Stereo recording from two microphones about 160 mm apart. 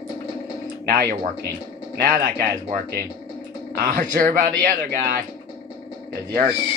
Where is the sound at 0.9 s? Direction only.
70° right (ahead or behind).